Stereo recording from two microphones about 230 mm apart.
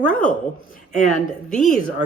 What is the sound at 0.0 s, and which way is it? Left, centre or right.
Speech, centre.